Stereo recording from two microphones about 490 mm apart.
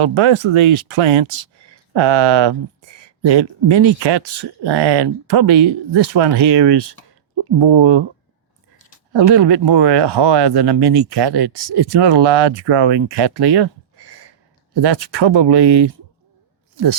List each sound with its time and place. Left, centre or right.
0.0 s speech: right
1.9 s speech: right
9.1 s speech: right